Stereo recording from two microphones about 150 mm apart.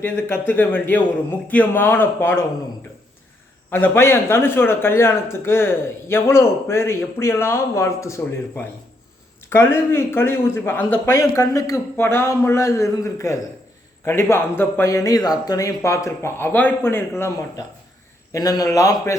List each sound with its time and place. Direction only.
0.0 s speech: 15° left (ahead or behind)
3.7 s a man's voice: 15° left (ahead or behind)